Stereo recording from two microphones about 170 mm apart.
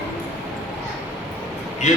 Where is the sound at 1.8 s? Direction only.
45° left (ahead or behind).